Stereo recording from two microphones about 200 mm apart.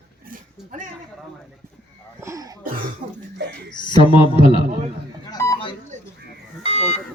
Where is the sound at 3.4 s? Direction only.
60° right (ahead or behind).